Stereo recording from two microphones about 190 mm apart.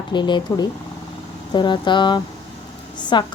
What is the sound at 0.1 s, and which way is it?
Speech, 25° left (ahead or behind).